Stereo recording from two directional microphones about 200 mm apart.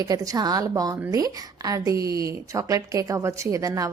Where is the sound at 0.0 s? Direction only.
20° right (ahead or behind).